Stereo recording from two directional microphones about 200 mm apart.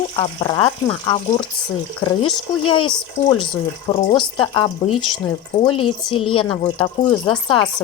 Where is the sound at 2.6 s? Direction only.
25° left (ahead or behind).